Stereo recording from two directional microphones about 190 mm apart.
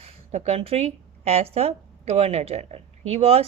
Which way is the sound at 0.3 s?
35° right (ahead or behind).